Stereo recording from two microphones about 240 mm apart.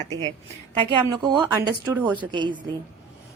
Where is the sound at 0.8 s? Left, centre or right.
Centre.